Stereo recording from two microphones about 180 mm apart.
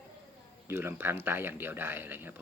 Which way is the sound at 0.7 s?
15° right (ahead or behind).